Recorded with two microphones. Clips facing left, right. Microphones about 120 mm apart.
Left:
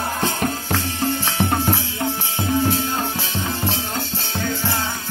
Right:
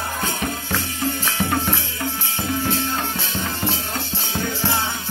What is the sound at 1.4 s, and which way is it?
Music, 30° left (ahead or behind).